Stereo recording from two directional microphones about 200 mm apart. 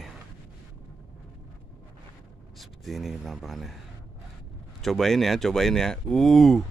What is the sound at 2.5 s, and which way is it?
Speech, centre (ahead or behind).